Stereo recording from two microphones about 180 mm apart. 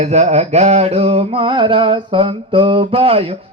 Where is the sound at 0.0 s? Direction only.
40° right (ahead or behind).